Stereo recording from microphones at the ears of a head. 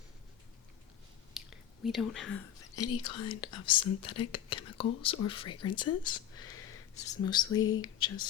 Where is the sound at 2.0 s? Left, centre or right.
Left.